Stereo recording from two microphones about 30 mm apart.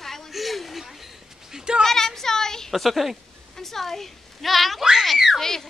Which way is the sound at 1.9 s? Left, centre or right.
Centre.